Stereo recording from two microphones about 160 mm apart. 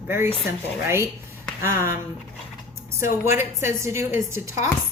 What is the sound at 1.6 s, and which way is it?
Speech, 15° right (ahead or behind).